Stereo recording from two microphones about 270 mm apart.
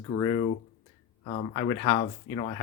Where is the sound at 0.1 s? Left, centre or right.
Centre.